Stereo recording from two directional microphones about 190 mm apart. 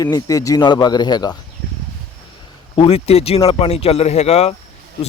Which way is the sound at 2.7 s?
30° left (ahead or behind).